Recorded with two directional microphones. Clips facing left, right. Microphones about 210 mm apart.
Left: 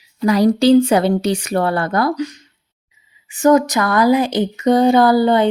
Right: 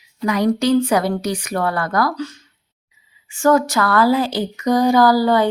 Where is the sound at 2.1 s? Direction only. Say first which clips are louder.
Left 4 dB; 15° left (ahead or behind).